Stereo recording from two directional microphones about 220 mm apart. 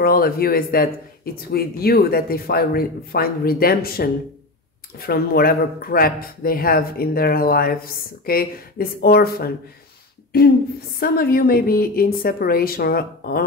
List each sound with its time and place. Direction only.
0.0 s speech: 45° left (ahead or behind)
11.0 s speech: 40° left (ahead or behind)